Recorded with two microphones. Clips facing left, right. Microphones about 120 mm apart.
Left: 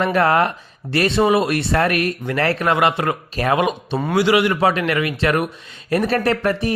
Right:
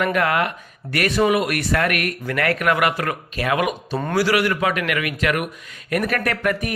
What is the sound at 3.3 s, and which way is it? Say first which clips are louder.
Speech: left 3 dB; 35° left (ahead or behind).